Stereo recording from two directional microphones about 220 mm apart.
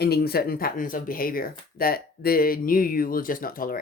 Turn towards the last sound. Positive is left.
turn(degrees=40)  # may be behind; listen again after turning